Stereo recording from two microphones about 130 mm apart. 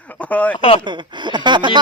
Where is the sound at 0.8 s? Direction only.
35° right (ahead or behind).